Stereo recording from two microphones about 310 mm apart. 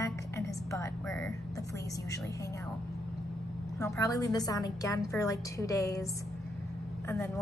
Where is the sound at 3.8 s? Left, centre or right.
Centre.